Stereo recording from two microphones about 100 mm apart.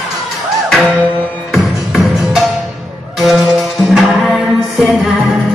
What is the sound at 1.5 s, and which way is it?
Music, 5° right (ahead or behind).